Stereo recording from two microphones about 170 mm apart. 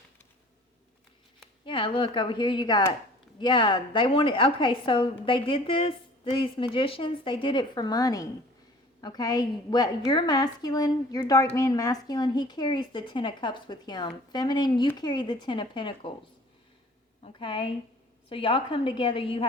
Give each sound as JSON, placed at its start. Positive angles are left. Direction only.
{"t": 1.6, "sound": "a woman's voice", "side_deg": 30}
{"t": 17.2, "sound": "a woman's voice", "side_deg": 30}